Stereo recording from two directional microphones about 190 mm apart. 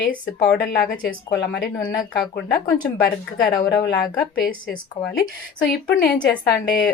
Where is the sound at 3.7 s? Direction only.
60° left (ahead or behind).